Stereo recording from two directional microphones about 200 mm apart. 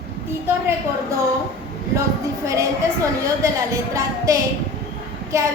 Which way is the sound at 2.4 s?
15° right (ahead or behind).